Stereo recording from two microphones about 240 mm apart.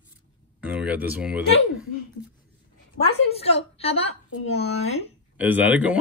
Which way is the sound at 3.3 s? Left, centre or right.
Left.